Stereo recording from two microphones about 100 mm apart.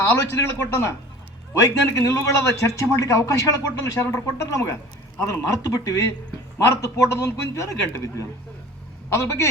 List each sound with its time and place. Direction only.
0.0 s a man's voice: 25° left (ahead or behind)